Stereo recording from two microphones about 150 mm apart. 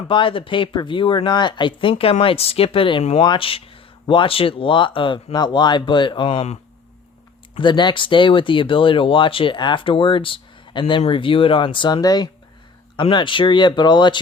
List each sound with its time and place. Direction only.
0.1 s speech: 35° left (ahead or behind)
7.6 s speech: 30° left (ahead or behind)